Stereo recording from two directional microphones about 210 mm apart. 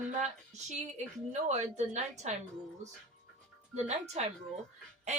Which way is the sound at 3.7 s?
30° right (ahead or behind).